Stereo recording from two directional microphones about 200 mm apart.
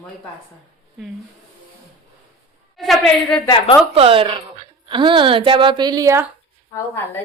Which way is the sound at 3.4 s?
25° left (ahead or behind).